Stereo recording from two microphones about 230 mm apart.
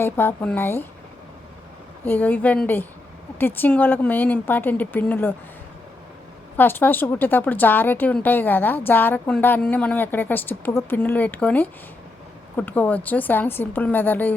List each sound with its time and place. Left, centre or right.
0.0 s a woman's voice: centre
2.0 s a woman's voice: centre
6.6 s a woman's voice: centre